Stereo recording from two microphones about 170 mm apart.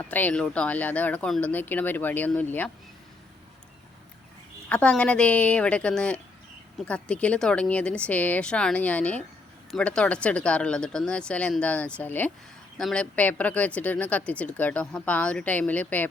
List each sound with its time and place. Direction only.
0.0 s speech: 10° left (ahead or behind)
4.7 s speech: 10° left (ahead or behind)